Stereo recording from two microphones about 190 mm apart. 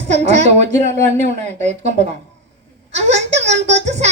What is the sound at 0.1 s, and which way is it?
A child's voice, 35° right (ahead or behind).